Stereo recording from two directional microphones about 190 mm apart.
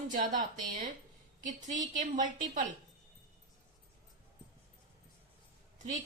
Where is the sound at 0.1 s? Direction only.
40° right (ahead or behind).